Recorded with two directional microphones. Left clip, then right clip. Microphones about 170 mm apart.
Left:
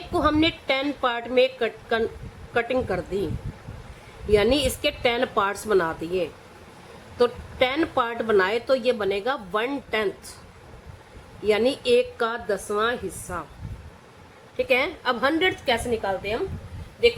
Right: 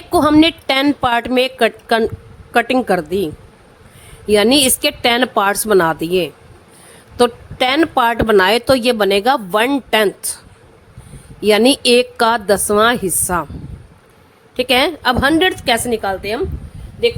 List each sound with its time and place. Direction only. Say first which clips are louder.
0.1 s a woman's voice: right 10 dB; 65° right (ahead or behind); by 3.2 s 50° right (ahead or behind)
4.3 s speech: right 8 dB; 60° right (ahead or behind)
11.4 s a woman's voice: right 9 dB; 65° right (ahead or behind)
14.5 s speech: right 8 dB; 65° right (ahead or behind)